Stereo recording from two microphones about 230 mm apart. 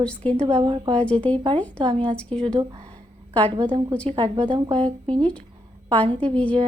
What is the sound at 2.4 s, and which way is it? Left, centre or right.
Speech, right.